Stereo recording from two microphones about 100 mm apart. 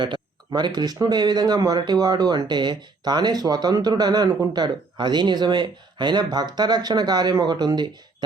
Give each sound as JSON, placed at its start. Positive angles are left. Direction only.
{"t": 0.0, "sound": "speech", "side_deg": -50}